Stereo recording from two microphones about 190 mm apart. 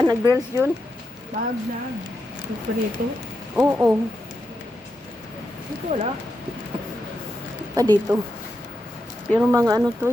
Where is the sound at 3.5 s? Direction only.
10° right (ahead or behind).